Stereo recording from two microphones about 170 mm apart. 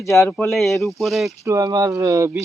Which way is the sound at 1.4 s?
20° right (ahead or behind).